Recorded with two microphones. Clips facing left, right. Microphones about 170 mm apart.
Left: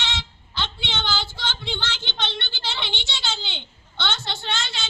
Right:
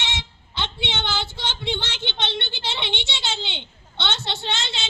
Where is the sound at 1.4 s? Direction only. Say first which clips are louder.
Right 3 dB; 25° right (ahead or behind).